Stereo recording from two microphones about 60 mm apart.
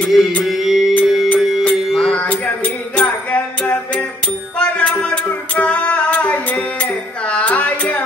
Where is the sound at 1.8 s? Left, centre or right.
Centre.